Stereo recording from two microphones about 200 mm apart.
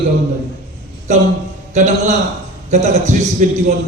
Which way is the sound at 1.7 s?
35° right (ahead or behind).